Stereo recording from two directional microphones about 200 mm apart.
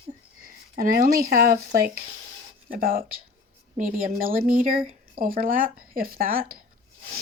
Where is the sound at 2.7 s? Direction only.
45° right (ahead or behind).